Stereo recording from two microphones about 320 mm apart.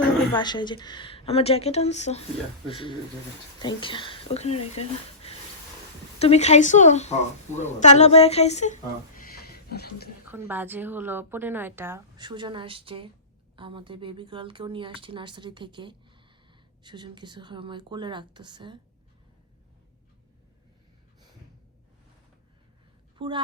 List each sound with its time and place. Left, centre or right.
0.3 s a woman's voice: centre; by 10.1 s left
10.3 s a woman's voice: centre
23.1 s speech: centre